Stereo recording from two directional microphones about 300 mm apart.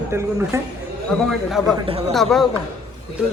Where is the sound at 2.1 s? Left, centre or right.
Centre.